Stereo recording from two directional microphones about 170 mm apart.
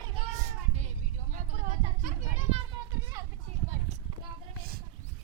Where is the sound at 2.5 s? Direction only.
25° right (ahead or behind).